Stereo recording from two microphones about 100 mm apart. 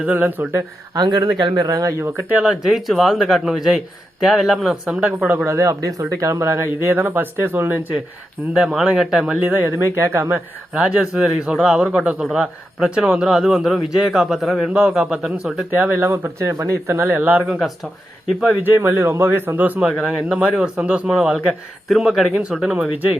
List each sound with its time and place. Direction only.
0.0 s speech: 15° right (ahead or behind)
0.9 s speech: 40° right (ahead or behind); by 2.4 s 20° right (ahead or behind)
2.4 s a man's voice: 5° right (ahead or behind)
5.5 s speech: 30° right (ahead or behind)
8.5 s a man's voice: 5° right (ahead or behind)
15.7 s speech: 20° right (ahead or behind)
16.5 s speech: 35° right (ahead or behind)
16.8 s speech: 20° right (ahead or behind)
18.6 s a man's voice: 20° right (ahead or behind); by 22.9 s 5° right (ahead or behind)